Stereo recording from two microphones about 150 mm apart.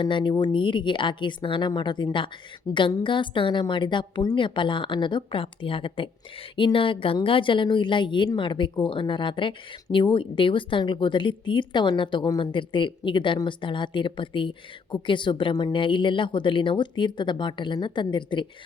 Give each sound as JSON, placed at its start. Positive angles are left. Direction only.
{"t": 0.0, "sound": "a woman's voice", "side_deg": 30}